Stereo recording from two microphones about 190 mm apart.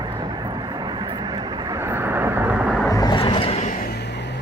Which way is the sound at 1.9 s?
10° right (ahead or behind).